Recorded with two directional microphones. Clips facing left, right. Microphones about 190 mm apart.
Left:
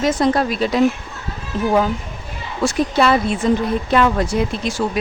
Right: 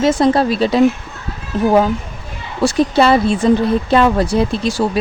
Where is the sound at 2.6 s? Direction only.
30° right (ahead or behind).